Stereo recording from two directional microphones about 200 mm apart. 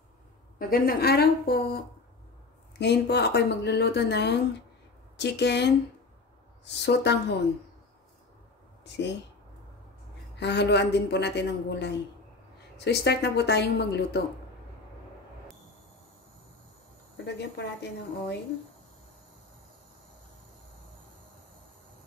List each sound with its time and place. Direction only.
0.6 s a woman's voice: 45° left (ahead or behind)
2.8 s a woman's voice: 55° left (ahead or behind)
8.8 s speech: 60° left (ahead or behind)
10.3 s a woman's voice: 60° left (ahead or behind)
17.2 s a woman's voice: 55° left (ahead or behind)